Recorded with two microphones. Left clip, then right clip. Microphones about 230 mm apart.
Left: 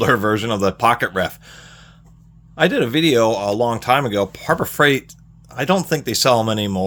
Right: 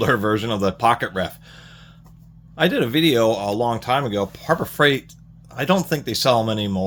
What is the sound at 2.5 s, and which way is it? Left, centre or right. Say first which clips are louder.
Speech: left 2 dB; centre.